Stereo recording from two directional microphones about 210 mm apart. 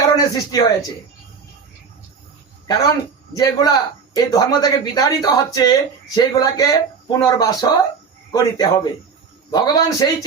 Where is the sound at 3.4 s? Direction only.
20° left (ahead or behind).